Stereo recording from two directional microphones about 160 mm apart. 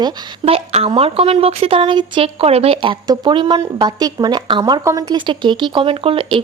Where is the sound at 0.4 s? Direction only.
40° right (ahead or behind).